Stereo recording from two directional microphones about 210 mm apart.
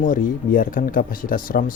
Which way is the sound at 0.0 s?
40° left (ahead or behind).